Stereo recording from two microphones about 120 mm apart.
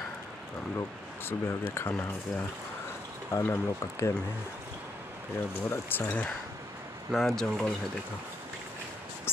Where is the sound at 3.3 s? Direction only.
20° left (ahead or behind).